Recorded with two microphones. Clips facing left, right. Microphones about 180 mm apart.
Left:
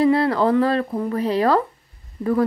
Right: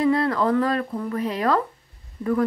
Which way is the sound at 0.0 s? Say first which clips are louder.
Left 3 dB; 30° left (ahead or behind).